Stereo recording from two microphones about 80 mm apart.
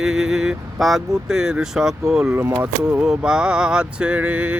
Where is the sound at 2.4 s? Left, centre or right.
Right.